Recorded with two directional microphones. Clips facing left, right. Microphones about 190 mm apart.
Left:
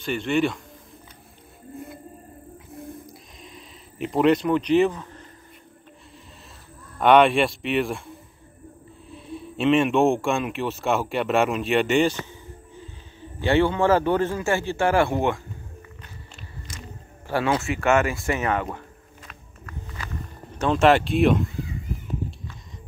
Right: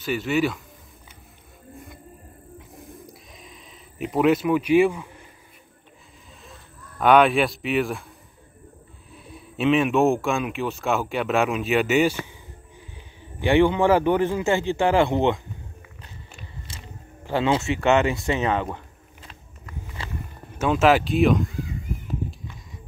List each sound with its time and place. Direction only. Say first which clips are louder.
0.0 s speech: even; 5° right (ahead or behind)
2.7 s a sound: left 7 dB; centre (ahead or behind)
7.0 s speech: left 1 dB; centre (ahead or behind); by 15.4 s 20° right (ahead or behind)
16.7 s a sound: left 6 dB; 30° right (ahead or behind)
17.3 s speech: right 1 dB; 20° right (ahead or behind)
19.6 s walk: right 1 dB; 20° right (ahead or behind)
20.5 s speech: even; 5° right (ahead or behind)